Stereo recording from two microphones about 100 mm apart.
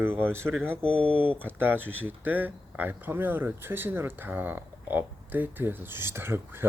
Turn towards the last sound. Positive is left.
turn(degrees=-20)  # may be behind; listen again after turning